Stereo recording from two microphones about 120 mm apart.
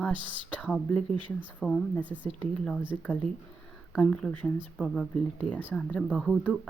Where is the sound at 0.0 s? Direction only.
10° left (ahead or behind).